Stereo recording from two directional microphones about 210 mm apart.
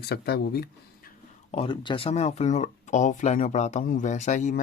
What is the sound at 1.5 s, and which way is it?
Speech, 25° left (ahead or behind).